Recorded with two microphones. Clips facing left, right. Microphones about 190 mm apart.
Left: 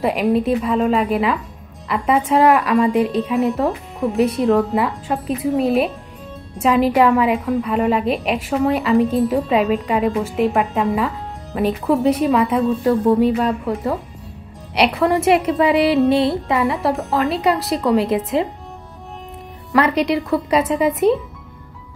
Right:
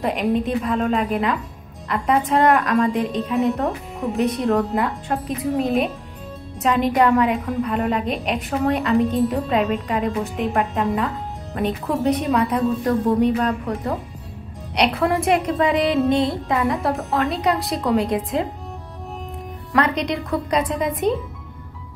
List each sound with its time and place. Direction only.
0.0 s a woman's voice: 5° left (ahead or behind)
19.7 s a woman's voice: 5° left (ahead or behind)